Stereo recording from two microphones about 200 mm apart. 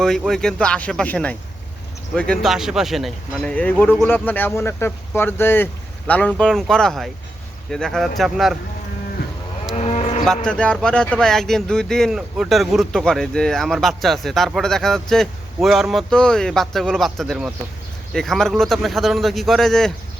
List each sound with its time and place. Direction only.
0.0 s speech: centre (ahead or behind)
9.7 s moo: 30° left (ahead or behind)
10.2 s speech: 5° left (ahead or behind)